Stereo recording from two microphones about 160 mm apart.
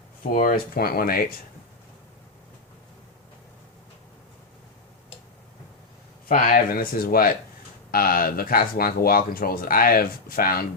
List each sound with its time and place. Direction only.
0.2 s speech: 60° left (ahead or behind)
6.2 s speech: 55° left (ahead or behind)